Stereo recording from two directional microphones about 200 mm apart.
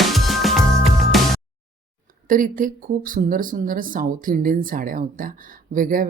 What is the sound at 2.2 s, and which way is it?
A woman's voice, 45° right (ahead or behind).